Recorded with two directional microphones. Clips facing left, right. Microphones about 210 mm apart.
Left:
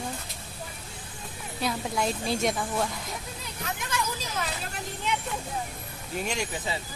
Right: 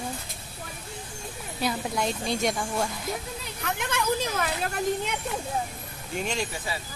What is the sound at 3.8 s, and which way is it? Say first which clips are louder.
Hubbub: right 7 dB; 60° right (ahead or behind).